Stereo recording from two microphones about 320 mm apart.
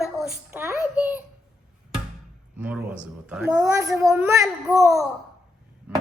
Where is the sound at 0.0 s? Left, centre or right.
Centre.